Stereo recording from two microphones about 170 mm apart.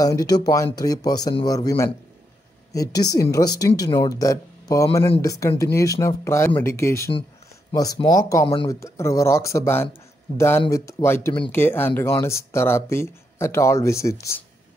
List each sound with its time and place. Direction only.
0.0 s speech: 20° left (ahead or behind)